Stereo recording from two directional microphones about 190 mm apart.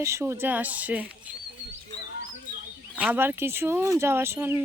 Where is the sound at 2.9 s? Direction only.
10° right (ahead or behind).